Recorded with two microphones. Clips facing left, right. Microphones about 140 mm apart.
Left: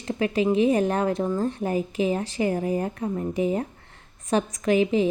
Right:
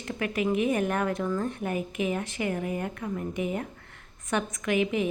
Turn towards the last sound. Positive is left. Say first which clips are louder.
# left 5 dB
turn(degrees=30)  # may be behind; listen again after turning